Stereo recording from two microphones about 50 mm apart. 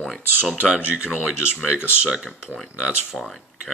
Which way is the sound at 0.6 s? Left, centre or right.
Right.